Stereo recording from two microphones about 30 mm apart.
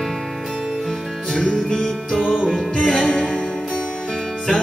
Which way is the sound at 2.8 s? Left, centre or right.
Centre.